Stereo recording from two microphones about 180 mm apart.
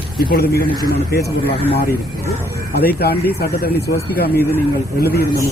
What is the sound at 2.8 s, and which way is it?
Speech, 60° left (ahead or behind).